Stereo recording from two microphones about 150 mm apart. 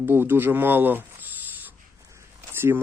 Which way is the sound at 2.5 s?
15° right (ahead or behind).